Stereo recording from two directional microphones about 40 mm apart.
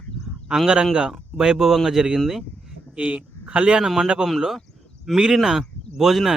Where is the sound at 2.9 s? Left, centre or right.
Right.